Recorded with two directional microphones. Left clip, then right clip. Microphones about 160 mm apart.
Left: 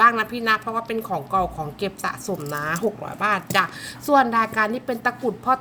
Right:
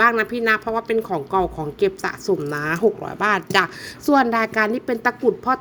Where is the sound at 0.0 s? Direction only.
30° right (ahead or behind).